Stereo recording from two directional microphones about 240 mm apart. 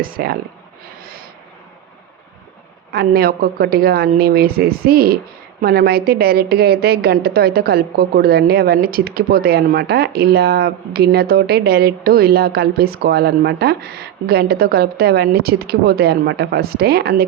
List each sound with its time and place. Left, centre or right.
0.0 s a woman's voice: right
1.0 s snort: right
2.9 s a woman's voice: right